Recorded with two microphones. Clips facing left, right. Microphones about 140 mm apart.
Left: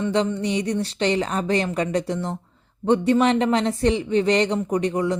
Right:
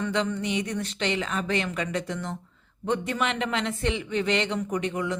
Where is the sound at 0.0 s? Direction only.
30° left (ahead or behind).